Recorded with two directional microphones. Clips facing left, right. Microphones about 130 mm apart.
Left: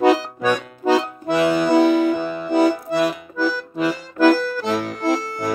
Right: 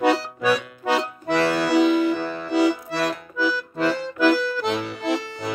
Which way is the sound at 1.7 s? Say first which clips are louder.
Left 2 dB; 50° left (ahead or behind).